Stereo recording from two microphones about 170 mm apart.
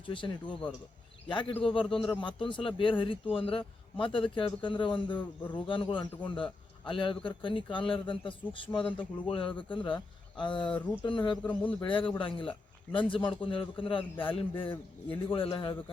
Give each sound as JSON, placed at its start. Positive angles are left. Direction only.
{"t": 0.0, "sound": "a man's voice", "side_deg": 30}
{"t": 8.9, "sound": "speech", "side_deg": 10}
{"t": 9.2, "sound": "speech", "side_deg": 30}
{"t": 11.4, "sound": "speech", "side_deg": 10}
{"t": 11.8, "sound": "a man's voice", "side_deg": 30}